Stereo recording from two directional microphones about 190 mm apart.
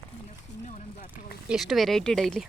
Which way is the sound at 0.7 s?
40° left (ahead or behind).